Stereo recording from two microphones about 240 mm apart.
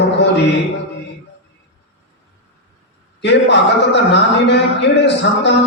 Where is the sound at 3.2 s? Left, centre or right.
Left.